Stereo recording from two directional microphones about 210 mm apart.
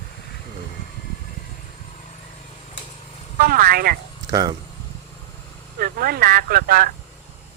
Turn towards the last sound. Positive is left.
turn(degrees=-45)  # may be behind; listen again after turning